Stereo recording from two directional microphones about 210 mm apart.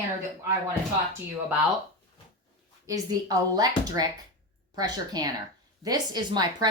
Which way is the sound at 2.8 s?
15° right (ahead or behind).